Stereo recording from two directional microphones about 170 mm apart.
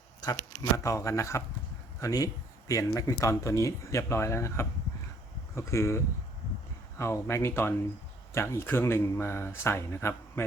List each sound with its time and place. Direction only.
0.6 s speech: 20° left (ahead or behind)
7.0 s speech: 15° left (ahead or behind)